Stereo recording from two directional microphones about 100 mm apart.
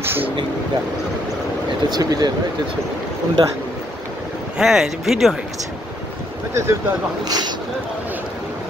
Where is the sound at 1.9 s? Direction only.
40° right (ahead or behind).